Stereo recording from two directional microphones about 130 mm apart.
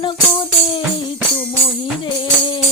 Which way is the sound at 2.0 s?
40° left (ahead or behind).